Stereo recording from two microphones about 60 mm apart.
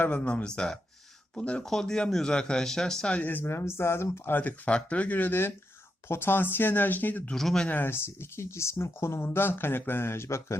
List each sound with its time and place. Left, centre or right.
0.0 s speech: left
1.6 s speech: centre
3.4 s speech: left
4.4 s speech: left
7.3 s speech: centre
7.7 s speech: left
7.9 s speech: left